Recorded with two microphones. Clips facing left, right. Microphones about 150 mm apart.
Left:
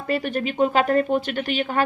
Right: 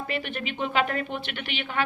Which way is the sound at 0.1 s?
40° left (ahead or behind).